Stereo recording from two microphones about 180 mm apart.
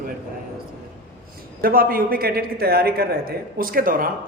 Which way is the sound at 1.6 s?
55° right (ahead or behind).